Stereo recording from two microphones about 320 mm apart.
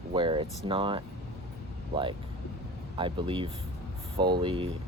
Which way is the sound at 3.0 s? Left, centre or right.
Centre.